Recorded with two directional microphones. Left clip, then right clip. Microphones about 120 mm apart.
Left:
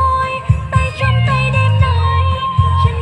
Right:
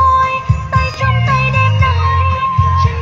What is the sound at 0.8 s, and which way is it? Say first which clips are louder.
Music: right 2 dB; 50° left (ahead or behind).